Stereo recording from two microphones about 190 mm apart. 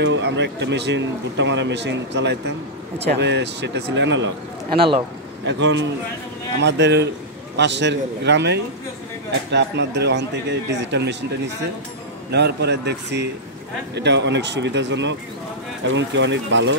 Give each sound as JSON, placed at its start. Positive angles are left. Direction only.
{"t": 0.0, "sound": "speech", "side_deg": -65}
{"t": 4.7, "sound": "speech", "side_deg": -25}
{"t": 5.4, "sound": "speech", "side_deg": -70}
{"t": 12.3, "sound": "speech", "side_deg": -60}